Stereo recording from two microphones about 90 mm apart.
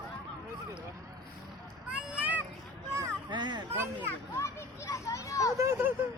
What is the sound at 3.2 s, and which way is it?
Children playing, 55° right (ahead or behind).